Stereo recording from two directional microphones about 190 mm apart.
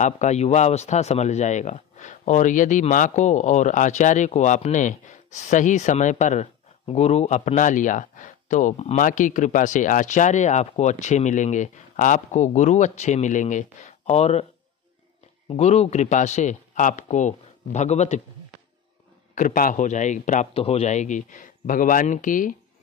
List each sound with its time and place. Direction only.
0.0 s speech: 35° left (ahead or behind)
15.4 s speech: 35° left (ahead or behind)
19.3 s speech: 45° left (ahead or behind)